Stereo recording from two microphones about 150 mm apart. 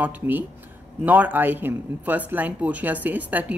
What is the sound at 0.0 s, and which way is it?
A woman's voice, 10° right (ahead or behind).